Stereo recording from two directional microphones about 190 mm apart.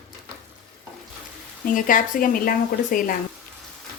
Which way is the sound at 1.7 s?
45° left (ahead or behind).